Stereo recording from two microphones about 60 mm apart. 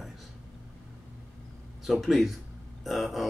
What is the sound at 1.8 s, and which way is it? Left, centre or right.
Speech, centre.